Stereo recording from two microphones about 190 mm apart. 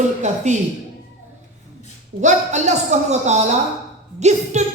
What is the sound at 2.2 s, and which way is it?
Speech, 40° right (ahead or behind).